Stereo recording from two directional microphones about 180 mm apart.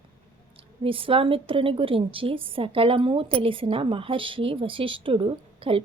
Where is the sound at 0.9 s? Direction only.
30° right (ahead or behind).